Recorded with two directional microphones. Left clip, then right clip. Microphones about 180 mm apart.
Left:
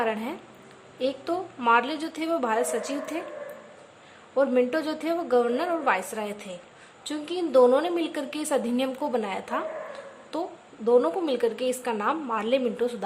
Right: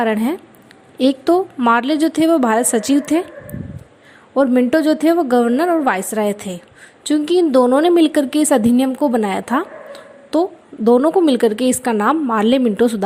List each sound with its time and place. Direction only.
0.0 s a woman's voice: 40° right (ahead or behind)
4.4 s a woman's voice: 40° right (ahead or behind)